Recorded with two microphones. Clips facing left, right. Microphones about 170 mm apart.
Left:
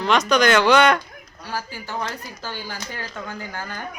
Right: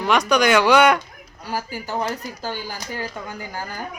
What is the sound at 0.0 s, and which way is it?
Speech, 10° right (ahead or behind).